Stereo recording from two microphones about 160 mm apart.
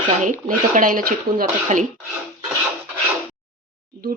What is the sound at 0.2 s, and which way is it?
Speech, 55° right (ahead or behind).